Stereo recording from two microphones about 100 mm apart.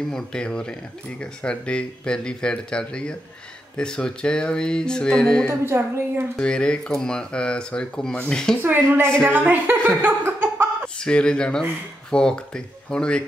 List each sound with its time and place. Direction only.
0.1 s speech: 10° left (ahead or behind)
5.5 s a woman's voice: 25° right (ahead or behind)
6.3 s speech: 10° left (ahead or behind)
8.6 s a woman's voice: 20° right (ahead or behind)
11.0 s speech: 10° left (ahead or behind)